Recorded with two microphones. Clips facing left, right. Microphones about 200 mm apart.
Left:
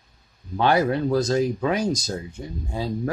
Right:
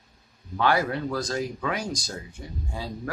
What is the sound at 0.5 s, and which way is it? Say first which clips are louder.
Speech: left 4 dB; 25° left (ahead or behind).